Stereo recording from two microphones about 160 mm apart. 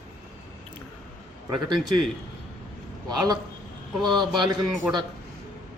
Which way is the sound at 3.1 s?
25° right (ahead or behind).